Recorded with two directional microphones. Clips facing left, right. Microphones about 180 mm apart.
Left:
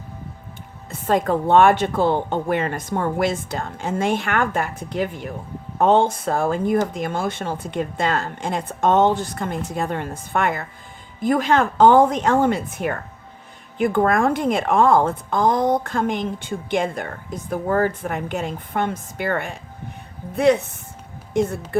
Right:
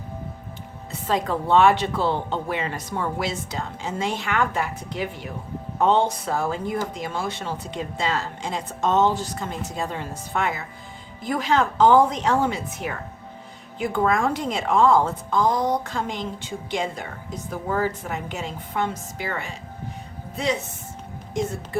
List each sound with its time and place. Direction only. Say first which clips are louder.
0.9 s a woman's voice: left 5 dB; 50° left (ahead or behind)